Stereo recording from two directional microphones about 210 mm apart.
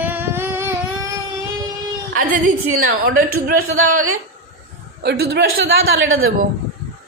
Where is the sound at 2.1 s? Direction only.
40° right (ahead or behind).